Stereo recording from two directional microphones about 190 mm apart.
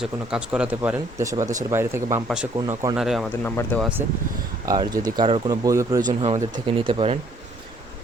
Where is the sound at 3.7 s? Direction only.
10° left (ahead or behind).